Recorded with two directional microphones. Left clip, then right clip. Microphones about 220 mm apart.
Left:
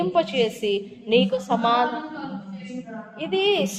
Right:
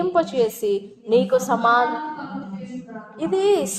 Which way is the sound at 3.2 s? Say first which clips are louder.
Right 2 dB; 30° right (ahead or behind).